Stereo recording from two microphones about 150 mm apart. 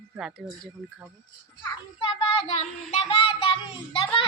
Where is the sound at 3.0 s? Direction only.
35° left (ahead or behind).